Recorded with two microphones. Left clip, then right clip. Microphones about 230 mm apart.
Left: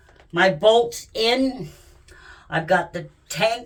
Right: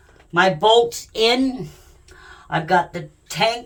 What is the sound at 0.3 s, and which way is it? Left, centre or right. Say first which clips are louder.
Speech: right 2 dB; right.